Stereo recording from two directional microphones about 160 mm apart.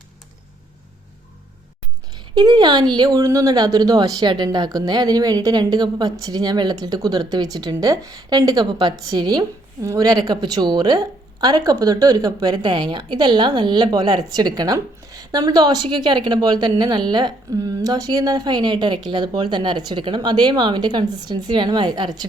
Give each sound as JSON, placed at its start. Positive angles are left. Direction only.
{"t": 2.1, "sound": "speech", "side_deg": -25}